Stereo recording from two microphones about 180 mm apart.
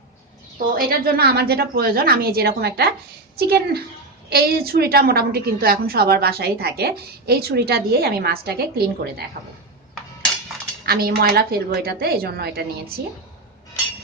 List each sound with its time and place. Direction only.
0.8 s a woman's voice: 55° right (ahead or behind)
10.8 s a woman's voice: 60° right (ahead or behind)